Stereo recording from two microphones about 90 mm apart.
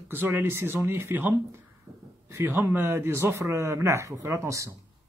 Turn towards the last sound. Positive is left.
turn(degrees=-35)  # may be behind; listen again after turning